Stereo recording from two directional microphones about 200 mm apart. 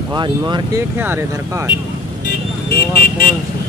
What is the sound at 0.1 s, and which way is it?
Speech, 20° right (ahead or behind).